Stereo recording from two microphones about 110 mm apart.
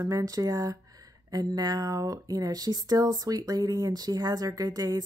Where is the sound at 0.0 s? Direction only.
30° right (ahead or behind).